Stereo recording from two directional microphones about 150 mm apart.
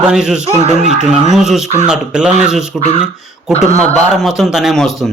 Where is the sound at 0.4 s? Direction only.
40° right (ahead or behind).